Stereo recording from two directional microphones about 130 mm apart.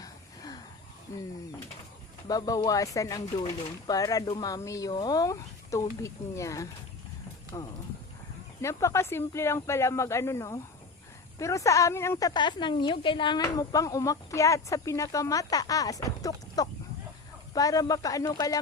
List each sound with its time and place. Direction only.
1.1 s speech: 25° left (ahead or behind)
12.3 s a woman's voice: 35° left (ahead or behind)
13.4 s speech: 25° left (ahead or behind)